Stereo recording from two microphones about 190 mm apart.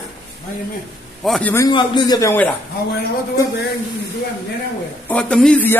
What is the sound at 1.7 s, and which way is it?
Speech, 25° left (ahead or behind).